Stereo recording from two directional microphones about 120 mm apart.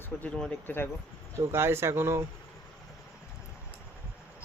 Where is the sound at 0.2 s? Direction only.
5° left (ahead or behind).